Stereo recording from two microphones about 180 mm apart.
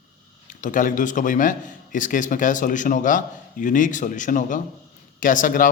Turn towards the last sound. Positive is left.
turn(degrees=50)  # may be behind; listen again after turning